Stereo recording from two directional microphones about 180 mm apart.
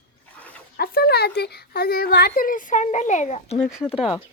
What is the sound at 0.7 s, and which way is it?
A woman's voice, 55° left (ahead or behind).